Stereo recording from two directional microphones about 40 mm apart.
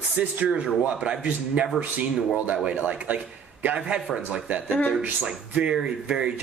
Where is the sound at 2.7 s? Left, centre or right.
Right.